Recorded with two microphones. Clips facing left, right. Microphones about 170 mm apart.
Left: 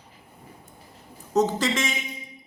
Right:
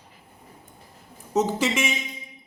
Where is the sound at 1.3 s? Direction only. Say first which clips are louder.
Left 1 dB; 10° right (ahead or behind).